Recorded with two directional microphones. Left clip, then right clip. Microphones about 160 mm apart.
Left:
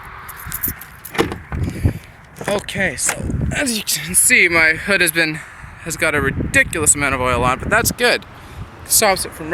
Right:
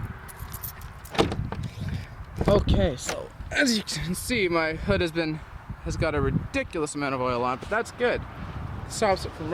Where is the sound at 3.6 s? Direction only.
30° right (ahead or behind).